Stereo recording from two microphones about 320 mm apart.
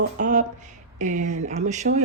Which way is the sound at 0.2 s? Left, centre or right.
Right.